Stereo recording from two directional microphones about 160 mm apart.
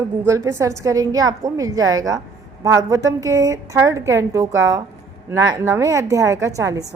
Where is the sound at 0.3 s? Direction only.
20° right (ahead or behind).